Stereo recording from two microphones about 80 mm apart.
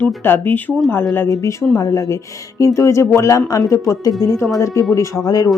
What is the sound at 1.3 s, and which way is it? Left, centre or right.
Speech, left.